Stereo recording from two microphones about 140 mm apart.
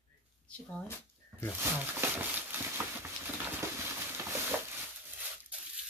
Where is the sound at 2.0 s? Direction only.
20° right (ahead or behind).